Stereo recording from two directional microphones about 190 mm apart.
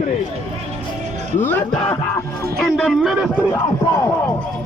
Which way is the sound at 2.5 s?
Centre (ahead or behind).